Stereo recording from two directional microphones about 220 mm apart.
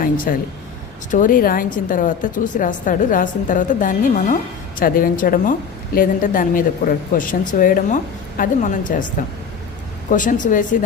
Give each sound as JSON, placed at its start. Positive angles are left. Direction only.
{"t": 0.3, "sound": "speech", "side_deg": 40}
{"t": 10.1, "sound": "speech", "side_deg": 35}